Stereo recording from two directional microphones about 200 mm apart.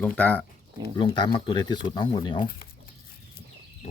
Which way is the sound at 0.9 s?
20° left (ahead or behind).